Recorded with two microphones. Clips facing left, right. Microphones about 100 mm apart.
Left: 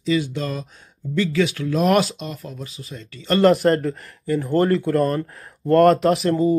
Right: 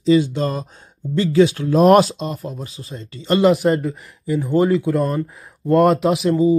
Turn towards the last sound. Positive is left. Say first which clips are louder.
# right 2 dB
turn(degrees=-5)  # may be behind; listen again after turning